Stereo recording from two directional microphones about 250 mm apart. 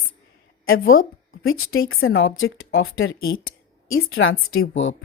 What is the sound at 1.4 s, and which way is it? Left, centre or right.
A woman's voice, left.